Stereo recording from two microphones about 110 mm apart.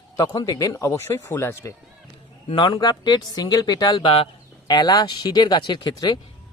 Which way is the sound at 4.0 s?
55° left (ahead or behind).